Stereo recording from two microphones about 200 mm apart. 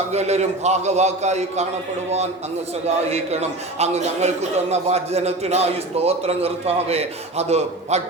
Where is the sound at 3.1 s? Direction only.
30° right (ahead or behind).